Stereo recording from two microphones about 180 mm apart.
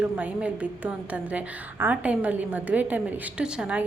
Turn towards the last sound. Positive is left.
turn(degrees=-5)  # may be behind; listen again after turning